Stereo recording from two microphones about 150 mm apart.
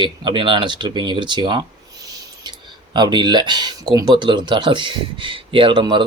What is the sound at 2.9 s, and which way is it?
Speech, 30° right (ahead or behind).